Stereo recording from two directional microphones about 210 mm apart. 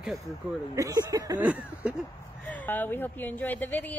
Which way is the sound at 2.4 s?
10° left (ahead or behind).